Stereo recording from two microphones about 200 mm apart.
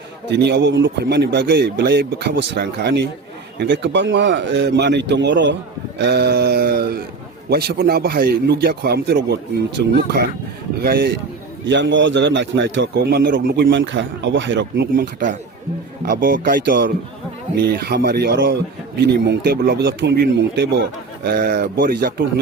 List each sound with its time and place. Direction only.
0.3 s a man's voice: 60° right (ahead or behind)
11.6 s a man's voice: 65° right (ahead or behind); by 22.1 s 45° right (ahead or behind)